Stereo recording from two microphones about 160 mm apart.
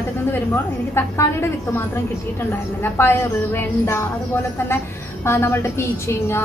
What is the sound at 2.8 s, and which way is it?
A woman's voice, 15° left (ahead or behind).